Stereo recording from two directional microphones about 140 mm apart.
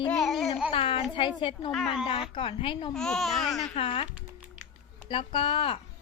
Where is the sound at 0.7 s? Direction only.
40° left (ahead or behind).